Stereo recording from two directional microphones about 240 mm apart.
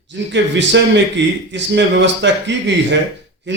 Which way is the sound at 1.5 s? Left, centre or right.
Right.